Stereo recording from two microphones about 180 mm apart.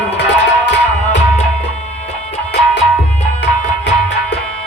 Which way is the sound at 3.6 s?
40° left (ahead or behind).